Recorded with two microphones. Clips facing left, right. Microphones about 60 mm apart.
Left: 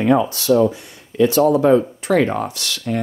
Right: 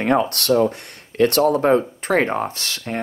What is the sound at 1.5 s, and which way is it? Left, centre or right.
Speech, right.